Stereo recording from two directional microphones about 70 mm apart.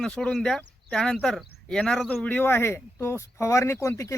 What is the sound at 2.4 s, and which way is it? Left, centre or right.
Speech, left.